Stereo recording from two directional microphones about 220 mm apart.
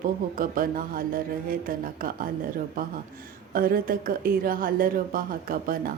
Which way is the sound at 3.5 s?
40° right (ahead or behind).